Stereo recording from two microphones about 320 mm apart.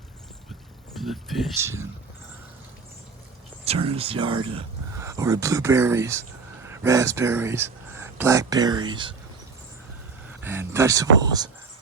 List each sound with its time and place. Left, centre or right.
0.9 s speech: centre
3.6 s speech: centre
10.4 s speech: centre